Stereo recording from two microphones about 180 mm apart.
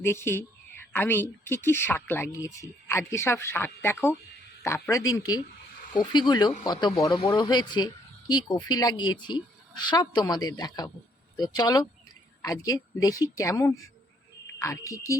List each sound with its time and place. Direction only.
0.0 s speech: 15° left (ahead or behind)